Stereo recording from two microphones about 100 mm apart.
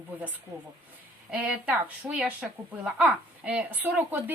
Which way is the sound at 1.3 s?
10° right (ahead or behind).